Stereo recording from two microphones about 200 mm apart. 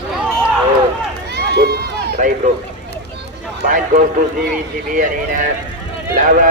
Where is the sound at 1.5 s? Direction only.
50° right (ahead or behind).